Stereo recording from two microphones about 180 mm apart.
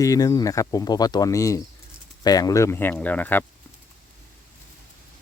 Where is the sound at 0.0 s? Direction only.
20° left (ahead or behind).